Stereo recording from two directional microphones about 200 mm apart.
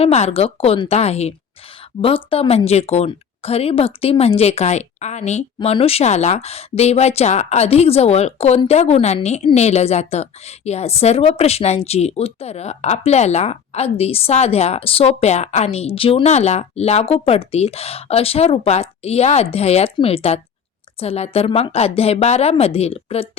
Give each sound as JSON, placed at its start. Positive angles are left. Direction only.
{"t": 0.0, "sound": "speech", "side_deg": 30}